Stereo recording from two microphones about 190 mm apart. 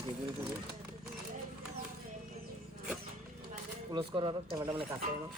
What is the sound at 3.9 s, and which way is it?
Speech, 25° right (ahead or behind).